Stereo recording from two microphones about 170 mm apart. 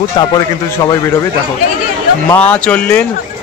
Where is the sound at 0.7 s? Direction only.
15° left (ahead or behind).